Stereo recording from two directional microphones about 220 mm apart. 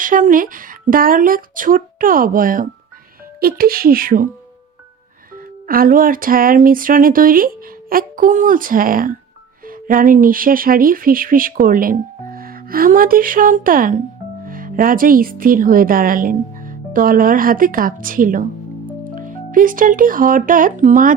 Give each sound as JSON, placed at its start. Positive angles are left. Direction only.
{"t": 0.0, "sound": "speech", "side_deg": -35}
{"t": 5.6, "sound": "speech", "side_deg": -40}